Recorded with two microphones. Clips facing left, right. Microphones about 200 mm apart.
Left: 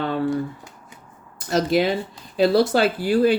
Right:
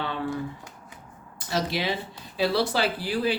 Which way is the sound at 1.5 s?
50° left (ahead or behind).